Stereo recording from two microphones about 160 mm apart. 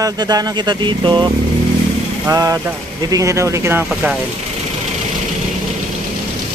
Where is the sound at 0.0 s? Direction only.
25° right (ahead or behind); by 4.2 s 5° right (ahead or behind).